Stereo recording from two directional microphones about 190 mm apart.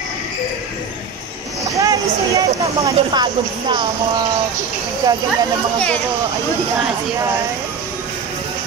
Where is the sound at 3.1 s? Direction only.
25° right (ahead or behind).